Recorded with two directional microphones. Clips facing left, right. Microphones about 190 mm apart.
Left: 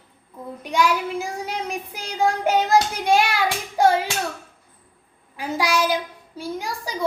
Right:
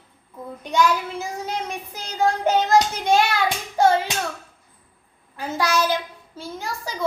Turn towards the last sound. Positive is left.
turn(degrees=15)  # may be behind; listen again after turning